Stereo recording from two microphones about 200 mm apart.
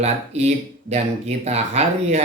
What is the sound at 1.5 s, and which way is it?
Speech, 35° right (ahead or behind).